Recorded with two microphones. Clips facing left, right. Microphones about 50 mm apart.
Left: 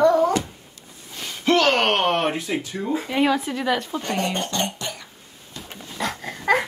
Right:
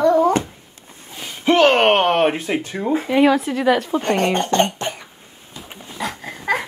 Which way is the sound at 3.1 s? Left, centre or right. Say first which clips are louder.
Right 6 dB; centre.